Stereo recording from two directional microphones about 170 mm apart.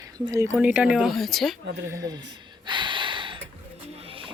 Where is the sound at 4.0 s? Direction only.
30° right (ahead or behind).